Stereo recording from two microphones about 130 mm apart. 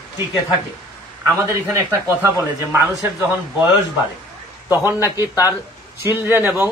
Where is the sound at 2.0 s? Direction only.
15° right (ahead or behind).